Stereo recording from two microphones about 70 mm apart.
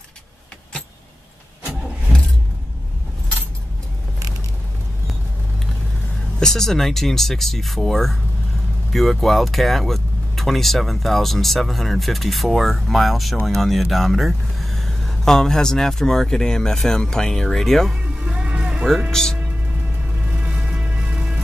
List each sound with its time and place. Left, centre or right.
6.4 s speech: centre
17.9 s music: centre
19.0 s speech: centre
20.2 s music: centre